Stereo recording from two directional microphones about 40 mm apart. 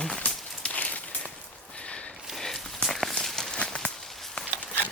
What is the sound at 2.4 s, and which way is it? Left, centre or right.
Walk, centre.